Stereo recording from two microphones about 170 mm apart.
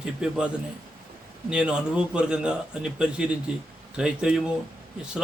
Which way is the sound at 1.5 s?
5° right (ahead or behind).